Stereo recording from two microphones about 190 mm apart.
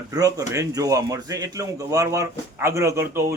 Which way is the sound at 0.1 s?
20° right (ahead or behind).